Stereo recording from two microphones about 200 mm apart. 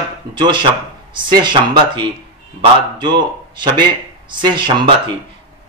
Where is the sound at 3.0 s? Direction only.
20° right (ahead or behind).